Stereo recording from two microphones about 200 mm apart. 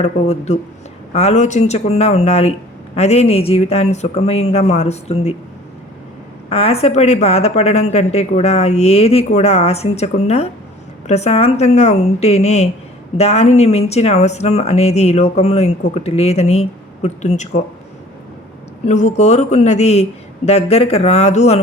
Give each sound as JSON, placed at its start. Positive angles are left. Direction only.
{"t": 0.0, "sound": "speech", "side_deg": 35}
{"t": 6.5, "sound": "speech", "side_deg": 30}
{"t": 18.9, "sound": "speech", "side_deg": 35}